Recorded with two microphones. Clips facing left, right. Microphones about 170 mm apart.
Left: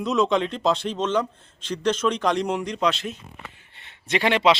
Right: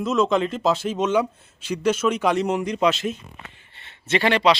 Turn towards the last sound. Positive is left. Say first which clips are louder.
# right 1 dB
turn(degrees=20)  # may be behind; listen again after turning